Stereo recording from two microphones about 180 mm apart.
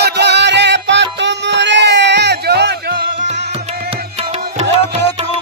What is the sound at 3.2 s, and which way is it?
Music, 40° right (ahead or behind).